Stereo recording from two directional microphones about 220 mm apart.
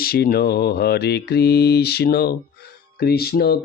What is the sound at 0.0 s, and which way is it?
Music, 45° left (ahead or behind).